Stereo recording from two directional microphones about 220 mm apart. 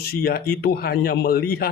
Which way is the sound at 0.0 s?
45° left (ahead or behind).